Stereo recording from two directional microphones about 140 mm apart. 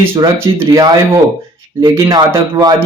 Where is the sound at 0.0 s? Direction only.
15° right (ahead or behind).